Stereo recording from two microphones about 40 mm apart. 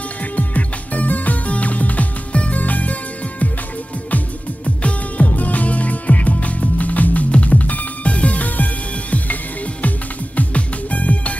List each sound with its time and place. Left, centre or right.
0.4 s music: left
4.6 s music: left